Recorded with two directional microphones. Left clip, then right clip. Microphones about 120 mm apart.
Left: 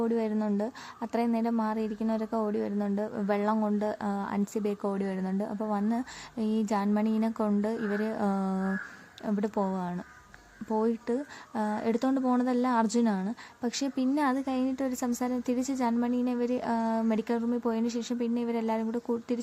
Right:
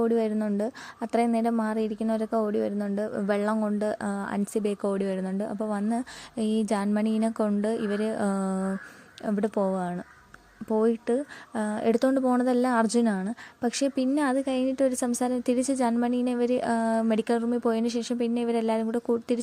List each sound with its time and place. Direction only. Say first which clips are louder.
0.0 s a woman's voice: right 4 dB; 30° right (ahead or behind)